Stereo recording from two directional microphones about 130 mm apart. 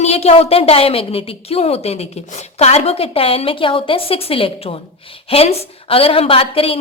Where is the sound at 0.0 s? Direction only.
50° left (ahead or behind).